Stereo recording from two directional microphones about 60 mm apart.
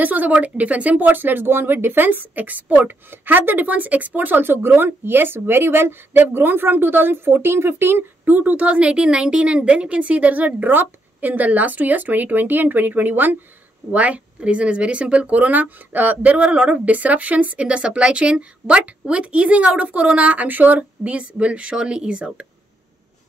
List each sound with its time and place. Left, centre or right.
0.0 s speech: right
8.3 s a woman's voice: right